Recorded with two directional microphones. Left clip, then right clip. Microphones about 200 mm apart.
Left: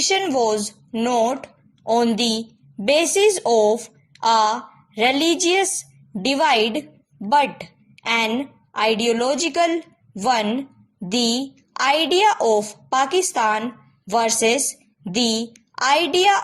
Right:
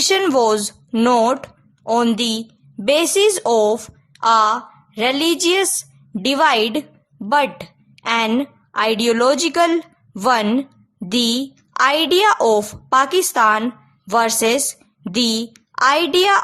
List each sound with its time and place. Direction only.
0.0 s a woman's voice: 20° right (ahead or behind)